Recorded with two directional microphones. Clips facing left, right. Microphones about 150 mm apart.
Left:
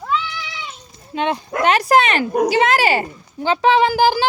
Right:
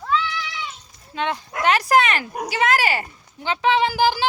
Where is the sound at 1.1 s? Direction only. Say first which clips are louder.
Left 5 dB; 20° left (ahead or behind).